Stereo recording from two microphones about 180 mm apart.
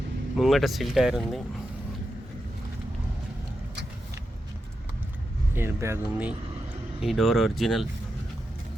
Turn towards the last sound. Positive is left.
turn(degrees=0)  # may be behind; listen again after turning